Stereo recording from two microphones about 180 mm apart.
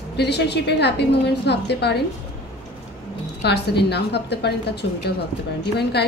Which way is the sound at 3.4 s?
65° left (ahead or behind).